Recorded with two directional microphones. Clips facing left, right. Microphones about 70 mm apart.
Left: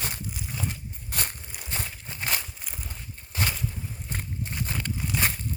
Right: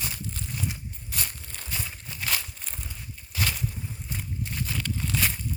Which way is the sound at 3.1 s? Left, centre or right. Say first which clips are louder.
Left 1 dB; left.